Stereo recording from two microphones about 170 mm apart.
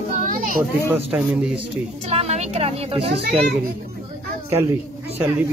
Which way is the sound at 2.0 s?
40° right (ahead or behind).